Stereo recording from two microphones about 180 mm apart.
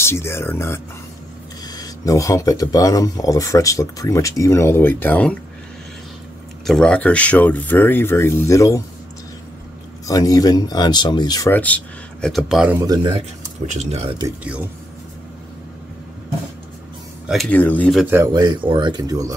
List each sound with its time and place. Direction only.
0.0 s speech: 15° left (ahead or behind)
6.6 s speech: 5° left (ahead or behind)
10.0 s speech: 20° left (ahead or behind)
11.5 s speech: 10° left (ahead or behind)
12.8 s speech: 20° right (ahead or behind)
13.1 s speech: 40° right (ahead or behind)
17.3 s speech: 5° left (ahead or behind)
18.1 s speech: 20° right (ahead or behind)